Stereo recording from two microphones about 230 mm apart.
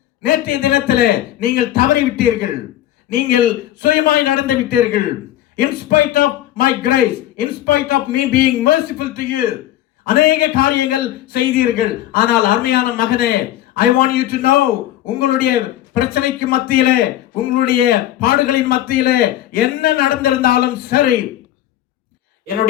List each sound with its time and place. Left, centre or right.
0.3 s a man's voice: left